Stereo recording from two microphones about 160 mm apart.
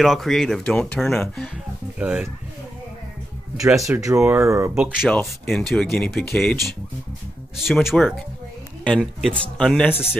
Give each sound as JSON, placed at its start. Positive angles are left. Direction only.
{"t": 0.0, "sound": "speech", "side_deg": 0}
{"t": 2.0, "sound": "speech", "side_deg": -5}
{"t": 3.6, "sound": "speech", "side_deg": 0}
{"t": 3.9, "sound": "speech", "side_deg": -20}
{"t": 4.7, "sound": "speech", "side_deg": -5}